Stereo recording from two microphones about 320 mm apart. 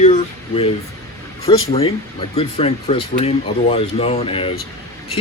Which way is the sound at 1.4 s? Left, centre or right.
Centre.